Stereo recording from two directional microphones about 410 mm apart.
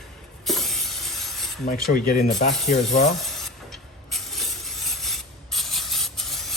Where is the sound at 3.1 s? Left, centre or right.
Centre.